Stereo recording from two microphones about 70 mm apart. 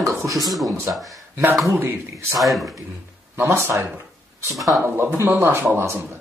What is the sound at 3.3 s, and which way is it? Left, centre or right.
Speech, right.